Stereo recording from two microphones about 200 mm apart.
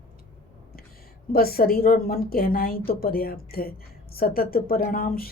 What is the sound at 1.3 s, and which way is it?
A woman's voice, 50° left (ahead or behind).